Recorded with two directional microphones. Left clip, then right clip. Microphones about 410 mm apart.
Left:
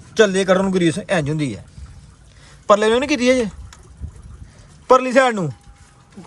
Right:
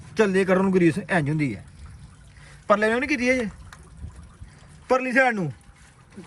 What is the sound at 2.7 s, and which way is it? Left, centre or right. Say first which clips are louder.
Speech: left 6 dB; centre.